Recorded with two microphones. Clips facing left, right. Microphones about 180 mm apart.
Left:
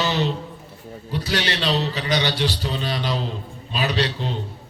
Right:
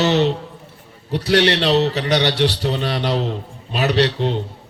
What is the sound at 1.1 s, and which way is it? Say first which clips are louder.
A man's voice: right 9 dB; 65° right (ahead or behind).